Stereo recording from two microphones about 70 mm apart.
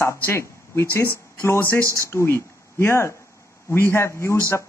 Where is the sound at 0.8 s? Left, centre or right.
Left.